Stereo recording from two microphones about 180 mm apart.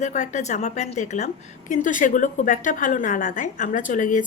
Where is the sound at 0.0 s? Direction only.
40° left (ahead or behind).